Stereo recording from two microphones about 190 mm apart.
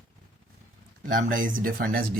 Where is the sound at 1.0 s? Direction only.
45° right (ahead or behind).